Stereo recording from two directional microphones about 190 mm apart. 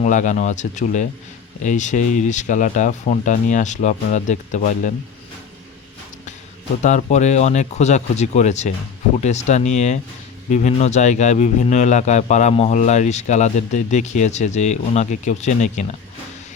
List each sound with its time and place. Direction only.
0.0 s a man's voice: 40° left (ahead or behind)
6.8 s a man's voice: 40° left (ahead or behind)